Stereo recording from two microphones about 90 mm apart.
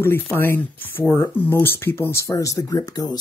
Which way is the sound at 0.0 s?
25° left (ahead or behind).